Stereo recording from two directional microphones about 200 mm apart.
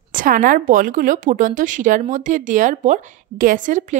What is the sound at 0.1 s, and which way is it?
A woman's voice, 45° right (ahead or behind).